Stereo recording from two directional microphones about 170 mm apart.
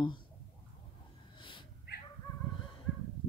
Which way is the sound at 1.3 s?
30° left (ahead or behind).